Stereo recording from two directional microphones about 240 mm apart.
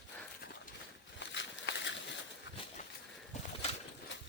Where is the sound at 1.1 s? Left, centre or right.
Left.